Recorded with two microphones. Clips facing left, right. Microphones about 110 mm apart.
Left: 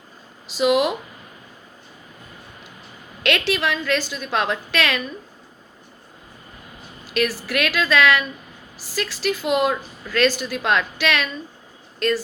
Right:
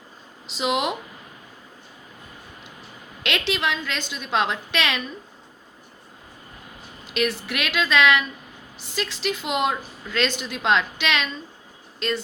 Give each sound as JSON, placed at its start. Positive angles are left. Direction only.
{"t": 0.4, "sound": "a woman's voice", "side_deg": -25}
{"t": 3.2, "sound": "a woman's voice", "side_deg": -20}
{"t": 7.1, "sound": "a woman's voice", "side_deg": -20}